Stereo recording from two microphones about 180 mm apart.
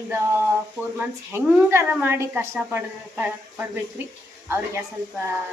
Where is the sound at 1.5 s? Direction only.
10° right (ahead or behind).